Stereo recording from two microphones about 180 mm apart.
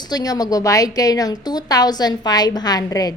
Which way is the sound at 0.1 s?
20° left (ahead or behind).